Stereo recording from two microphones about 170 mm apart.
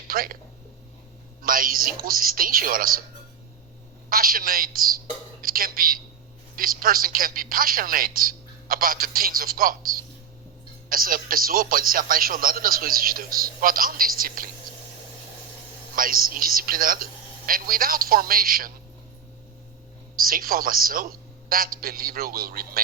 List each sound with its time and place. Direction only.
0.1 s speech: 60° right (ahead or behind)
1.4 s a man's voice: 55° right (ahead or behind)
4.1 s a man's voice: 55° right (ahead or behind)
16.0 s a man's voice: 55° right (ahead or behind)
20.1 s a man's voice: 60° right (ahead or behind)